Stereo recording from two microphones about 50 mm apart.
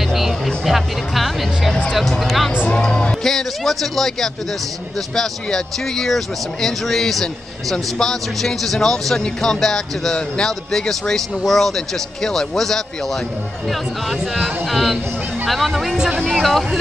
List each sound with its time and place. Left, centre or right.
0.0 s music: centre
0.7 s speech: centre
2.7 s music: centre
3.3 s speech: centre